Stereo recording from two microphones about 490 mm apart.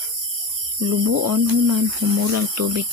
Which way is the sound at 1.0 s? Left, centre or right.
Right.